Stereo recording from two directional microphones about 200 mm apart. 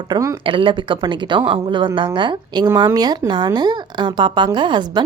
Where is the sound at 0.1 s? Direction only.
15° right (ahead or behind).